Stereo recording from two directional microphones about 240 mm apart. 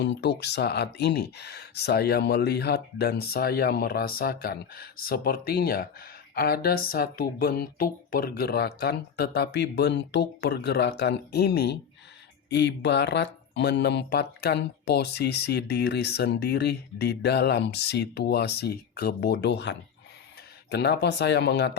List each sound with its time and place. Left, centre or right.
0.0 s speech: left